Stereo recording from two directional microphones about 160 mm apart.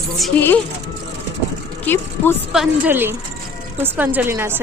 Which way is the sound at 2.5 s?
5° right (ahead or behind).